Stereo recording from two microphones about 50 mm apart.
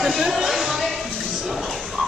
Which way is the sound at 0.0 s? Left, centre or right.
Centre.